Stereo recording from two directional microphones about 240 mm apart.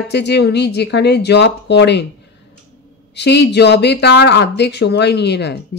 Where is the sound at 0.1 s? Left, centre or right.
Left.